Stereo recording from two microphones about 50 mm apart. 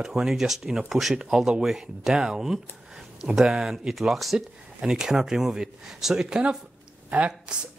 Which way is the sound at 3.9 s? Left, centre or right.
Centre.